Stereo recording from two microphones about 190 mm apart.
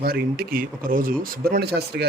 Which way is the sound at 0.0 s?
55° right (ahead or behind).